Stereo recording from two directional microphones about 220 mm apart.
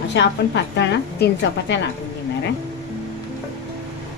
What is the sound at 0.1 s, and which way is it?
A woman's voice, 55° left (ahead or behind).